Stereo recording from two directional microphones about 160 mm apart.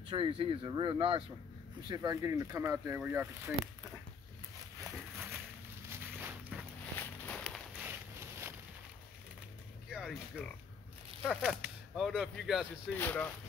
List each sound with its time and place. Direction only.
0.1 s speech: 35° right (ahead or behind)
1.9 s speech: 20° right (ahead or behind)
5.9 s walk: 10° right (ahead or behind)
7.0 s walk: 10° left (ahead or behind)
7.7 s a sound: 15° right (ahead or behind)
9.8 s a sound: 5° right (ahead or behind)
11.2 s speech: centre (ahead or behind)
12.9 s speech: 10° left (ahead or behind)